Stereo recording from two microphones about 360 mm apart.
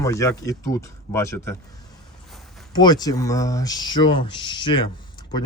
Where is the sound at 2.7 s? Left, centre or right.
Centre.